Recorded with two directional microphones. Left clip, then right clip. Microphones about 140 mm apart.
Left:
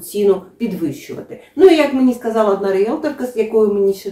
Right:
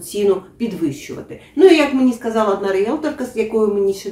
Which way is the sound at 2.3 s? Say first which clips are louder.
Left 2 dB; 15° right (ahead or behind).